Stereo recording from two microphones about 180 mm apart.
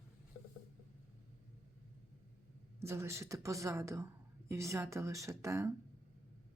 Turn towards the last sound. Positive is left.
turn(degrees=-15)  # may be behind; listen again after turning